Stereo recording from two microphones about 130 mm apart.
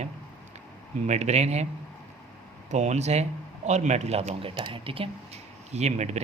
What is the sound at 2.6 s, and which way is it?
Speech, 60° right (ahead or behind).